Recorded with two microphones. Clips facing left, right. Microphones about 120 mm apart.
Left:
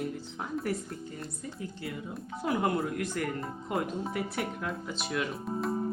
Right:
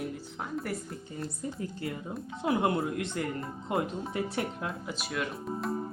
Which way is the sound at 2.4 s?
25° right (ahead or behind).